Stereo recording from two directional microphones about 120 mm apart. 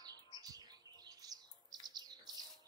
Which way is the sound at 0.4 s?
30° right (ahead or behind).